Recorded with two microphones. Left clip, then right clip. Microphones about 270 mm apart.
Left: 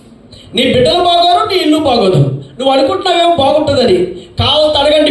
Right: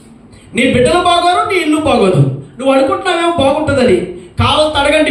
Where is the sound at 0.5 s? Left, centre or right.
Centre.